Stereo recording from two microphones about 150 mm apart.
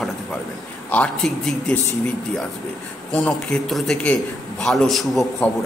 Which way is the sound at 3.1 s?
5° left (ahead or behind).